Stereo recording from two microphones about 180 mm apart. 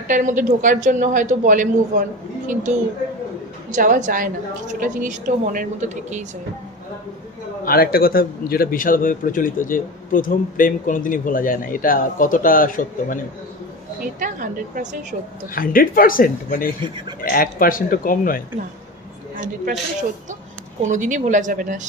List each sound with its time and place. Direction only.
0.1 s speech: 45° right (ahead or behind)
3.7 s speech: 45° right (ahead or behind)
7.6 s a man's voice: 55° left (ahead or behind)
14.0 s speech: 45° right (ahead or behind)
15.5 s a man's voice: 50° left (ahead or behind)
20.8 s speech: 45° right (ahead or behind)